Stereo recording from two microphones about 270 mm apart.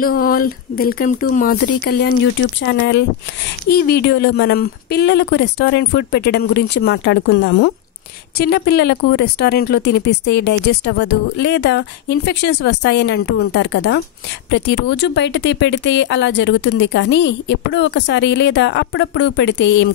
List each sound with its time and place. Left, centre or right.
0.0 s speech: left